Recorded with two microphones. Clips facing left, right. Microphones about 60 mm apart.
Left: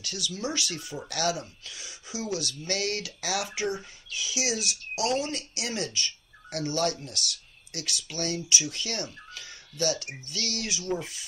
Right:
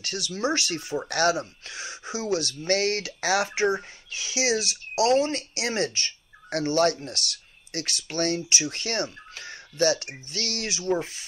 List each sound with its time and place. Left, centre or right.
0.0 s speech: right